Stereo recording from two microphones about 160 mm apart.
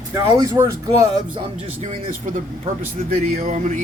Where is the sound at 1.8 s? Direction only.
50° right (ahead or behind).